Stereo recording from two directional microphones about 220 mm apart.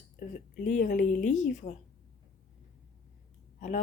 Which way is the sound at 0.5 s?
40° left (ahead or behind).